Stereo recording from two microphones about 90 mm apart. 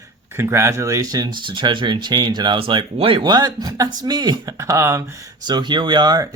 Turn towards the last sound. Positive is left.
turn(degrees=-45)  # may be behind; listen again after turning